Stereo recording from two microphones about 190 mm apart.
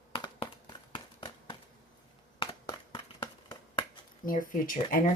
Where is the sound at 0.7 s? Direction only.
25° left (ahead or behind).